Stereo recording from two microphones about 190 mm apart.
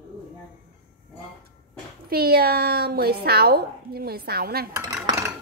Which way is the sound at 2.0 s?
55° right (ahead or behind).